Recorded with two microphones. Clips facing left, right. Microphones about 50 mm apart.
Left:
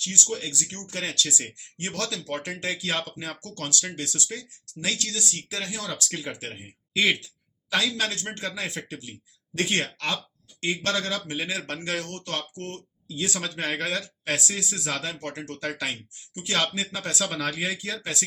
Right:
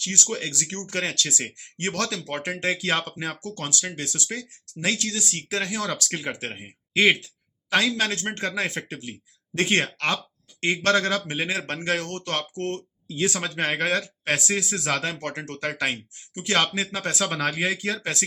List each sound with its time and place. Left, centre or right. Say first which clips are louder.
0.0 s a man's voice: right 2 dB; right
2.1 s speech: right 2 dB; right
5.5 s a man's voice: right 5 dB; right